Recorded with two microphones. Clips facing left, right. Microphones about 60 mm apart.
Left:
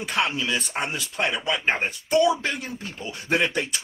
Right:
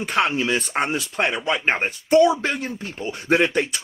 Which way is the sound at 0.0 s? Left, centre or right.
Right.